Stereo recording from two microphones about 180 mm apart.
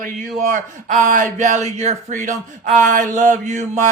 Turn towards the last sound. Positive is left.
turn(degrees=-45)  # may be behind; listen again after turning